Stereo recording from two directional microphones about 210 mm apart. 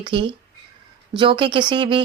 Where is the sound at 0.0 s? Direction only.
25° right (ahead or behind).